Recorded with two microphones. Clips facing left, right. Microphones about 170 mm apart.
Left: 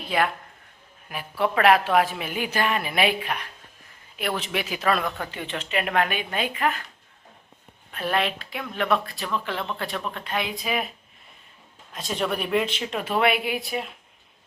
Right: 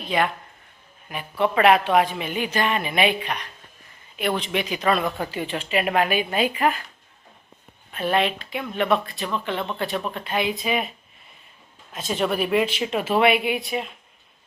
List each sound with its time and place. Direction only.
0.1 s speech: 5° left (ahead or behind)
7.9 s speech: centre (ahead or behind)
11.9 s speech: centre (ahead or behind)